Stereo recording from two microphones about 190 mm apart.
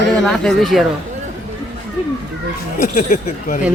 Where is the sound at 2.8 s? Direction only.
45° left (ahead or behind).